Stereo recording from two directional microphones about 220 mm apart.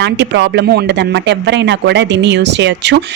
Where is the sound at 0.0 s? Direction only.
55° right (ahead or behind).